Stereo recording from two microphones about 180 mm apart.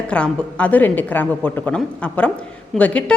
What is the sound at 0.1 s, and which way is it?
A woman's voice, 5° left (ahead or behind).